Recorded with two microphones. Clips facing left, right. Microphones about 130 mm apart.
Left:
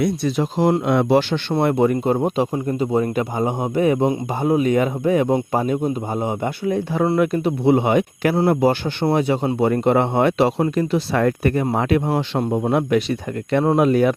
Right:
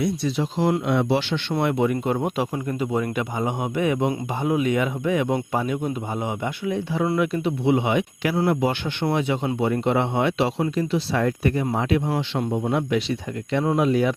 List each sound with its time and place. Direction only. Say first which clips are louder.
0.0 s speech: left 4 dB; 50° left (ahead or behind)